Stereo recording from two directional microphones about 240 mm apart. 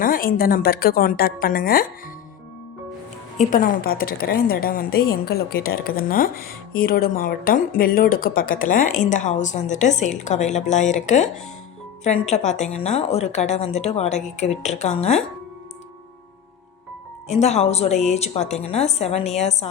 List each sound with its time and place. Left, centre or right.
0.0 s a woman's voice: left
3.5 s a woman's voice: left
17.2 s a woman's voice: left